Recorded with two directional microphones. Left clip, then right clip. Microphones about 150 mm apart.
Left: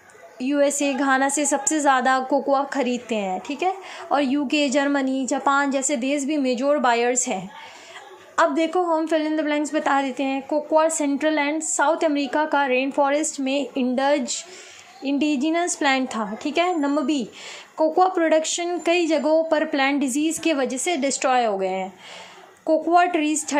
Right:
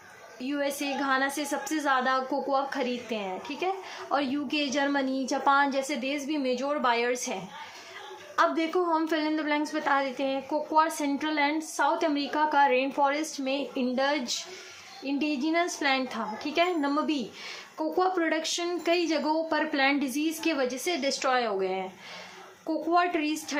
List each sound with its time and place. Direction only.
0.3 s a woman's voice: 35° left (ahead or behind)
8.4 s a woman's voice: 30° left (ahead or behind)